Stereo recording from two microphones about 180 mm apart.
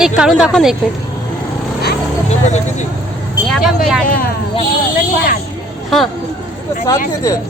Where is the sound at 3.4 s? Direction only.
Centre (ahead or behind).